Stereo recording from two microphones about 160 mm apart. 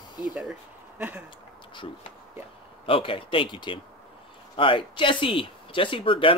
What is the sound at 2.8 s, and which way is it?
Speech, 35° left (ahead or behind).